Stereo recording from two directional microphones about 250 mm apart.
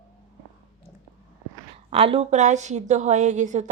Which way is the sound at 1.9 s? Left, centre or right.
Right.